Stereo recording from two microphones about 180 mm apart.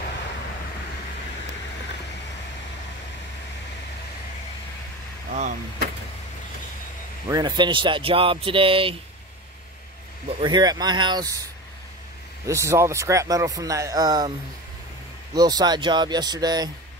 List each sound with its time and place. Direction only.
5.3 s speech: 40° right (ahead or behind)
7.2 s speech: 25° right (ahead or behind)
10.4 s speech: 25° right (ahead or behind)
12.4 s speech: 15° right (ahead or behind)
15.3 s speech: 20° right (ahead or behind)